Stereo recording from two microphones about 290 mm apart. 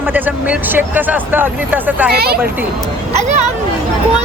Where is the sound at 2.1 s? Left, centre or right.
Right.